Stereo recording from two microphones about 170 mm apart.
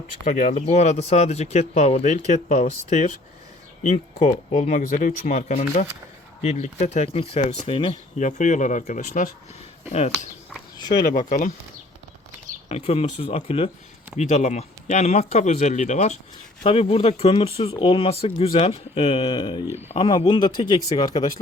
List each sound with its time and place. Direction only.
0.3 s speech: 45° left (ahead or behind)
11.3 s speech: 50° left (ahead or behind)
12.6 s speech: 40° left (ahead or behind)